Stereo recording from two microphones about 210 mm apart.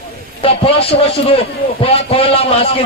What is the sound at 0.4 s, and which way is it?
Speech, 25° left (ahead or behind).